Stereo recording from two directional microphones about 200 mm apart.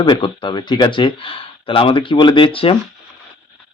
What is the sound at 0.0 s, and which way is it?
Speech, 25° left (ahead or behind).